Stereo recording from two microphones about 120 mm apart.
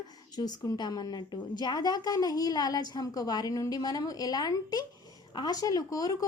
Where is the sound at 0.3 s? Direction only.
35° left (ahead or behind).